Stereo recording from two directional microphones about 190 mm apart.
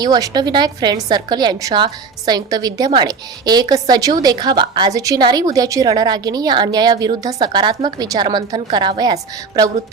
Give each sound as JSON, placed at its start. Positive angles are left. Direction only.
{"t": 0.0, "sound": "a woman's voice", "side_deg": -20}